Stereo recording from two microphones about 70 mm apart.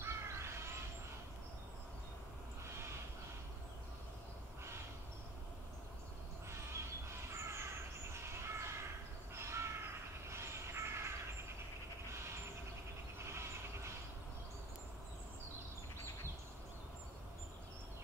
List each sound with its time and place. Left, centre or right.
0.0 s crow: right
6.5 s crow: right
8.1 s a sound: right
9.3 s crow: right
10.2 s vehicle: right
13.2 s a sound: right